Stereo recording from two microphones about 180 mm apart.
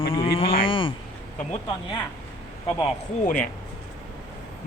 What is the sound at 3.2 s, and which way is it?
Speech, 45° left (ahead or behind).